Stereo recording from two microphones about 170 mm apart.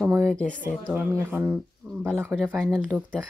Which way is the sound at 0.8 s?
10° right (ahead or behind).